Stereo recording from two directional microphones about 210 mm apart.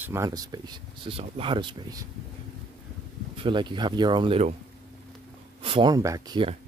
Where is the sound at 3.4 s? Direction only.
25° right (ahead or behind).